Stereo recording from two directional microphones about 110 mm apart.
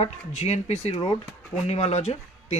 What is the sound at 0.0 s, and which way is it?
Speech, 80° left.